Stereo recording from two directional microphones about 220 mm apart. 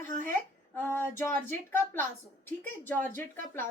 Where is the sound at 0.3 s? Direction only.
10° left (ahead or behind).